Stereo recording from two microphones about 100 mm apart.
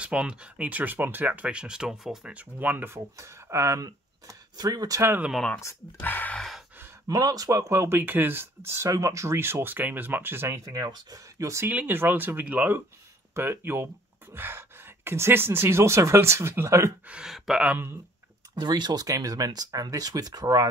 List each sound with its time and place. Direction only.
0.0 s speech: 10° right (ahead or behind); by 5.0 s 35° right (ahead or behind)
5.9 s a sound: 20° left (ahead or behind)
7.1 s speech: 40° right (ahead or behind); by 8.8 s 20° right (ahead or behind)
8.8 s speech: 30° right (ahead or behind)
10.7 s speech: 45° right (ahead or behind)
11.6 s speech: 20° right (ahead or behind)
17.0 s speech: 10° right (ahead or behind)
18.5 s speech: 45° right (ahead or behind)